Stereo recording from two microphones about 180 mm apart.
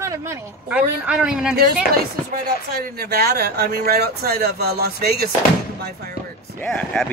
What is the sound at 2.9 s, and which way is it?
Speech, 60° right (ahead or behind).